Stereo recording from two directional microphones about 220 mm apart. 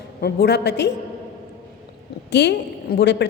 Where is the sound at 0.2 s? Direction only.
45° left (ahead or behind).